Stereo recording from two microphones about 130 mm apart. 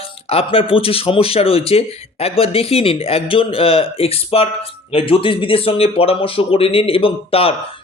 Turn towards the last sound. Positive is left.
turn(degrees=45)  # may be behind; listen again after turning